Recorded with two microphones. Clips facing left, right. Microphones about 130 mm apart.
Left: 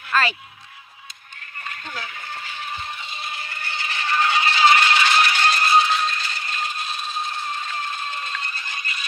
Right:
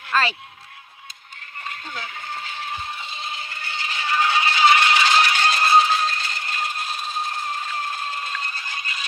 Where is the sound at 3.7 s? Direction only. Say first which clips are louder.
Even; 15° right (ahead or behind).